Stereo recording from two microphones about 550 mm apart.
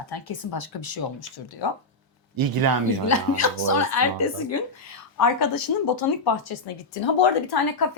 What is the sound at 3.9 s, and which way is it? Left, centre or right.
A woman's voice, left.